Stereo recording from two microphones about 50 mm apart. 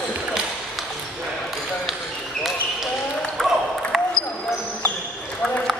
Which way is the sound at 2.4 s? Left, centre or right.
Centre.